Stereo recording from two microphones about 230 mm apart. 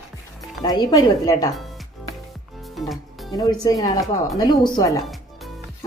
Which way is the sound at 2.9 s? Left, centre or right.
Centre.